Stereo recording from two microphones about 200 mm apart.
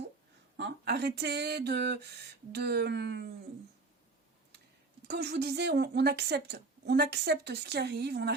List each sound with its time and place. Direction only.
0.5 s a woman's voice: 55° right (ahead or behind)
5.0 s a woman's voice: 55° right (ahead or behind)